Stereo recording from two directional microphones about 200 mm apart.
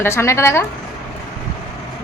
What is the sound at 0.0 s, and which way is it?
Speech, 15° left (ahead or behind).